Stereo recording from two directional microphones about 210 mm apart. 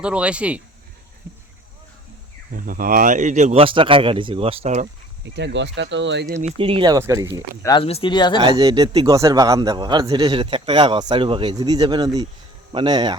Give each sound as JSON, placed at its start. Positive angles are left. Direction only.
{"t": 0.0, "sound": "speech", "side_deg": -5}
{"t": 2.5, "sound": "speech", "side_deg": -40}
{"t": 5.2, "sound": "speech", "side_deg": -55}
{"t": 6.4, "sound": "a man's voice", "side_deg": -25}
{"t": 7.6, "sound": "speech", "side_deg": 20}
{"t": 8.4, "sound": "a man's voice", "side_deg": -25}